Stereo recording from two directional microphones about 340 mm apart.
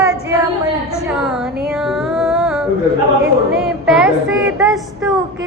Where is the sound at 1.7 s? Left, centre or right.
Centre.